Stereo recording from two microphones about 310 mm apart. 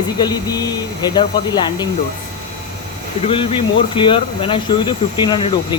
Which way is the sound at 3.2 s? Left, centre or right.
Centre.